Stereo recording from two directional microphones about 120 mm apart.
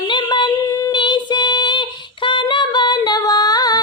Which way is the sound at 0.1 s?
40° left (ahead or behind).